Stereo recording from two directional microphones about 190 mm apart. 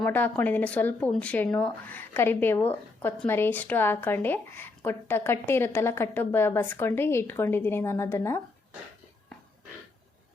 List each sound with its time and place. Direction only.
0.0 s speech: 10° left (ahead or behind)